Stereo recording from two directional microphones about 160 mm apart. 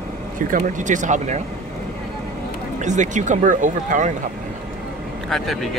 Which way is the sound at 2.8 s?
50° right (ahead or behind).